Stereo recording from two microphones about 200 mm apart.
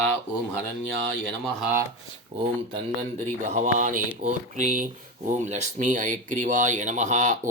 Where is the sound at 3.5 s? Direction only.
40° right (ahead or behind).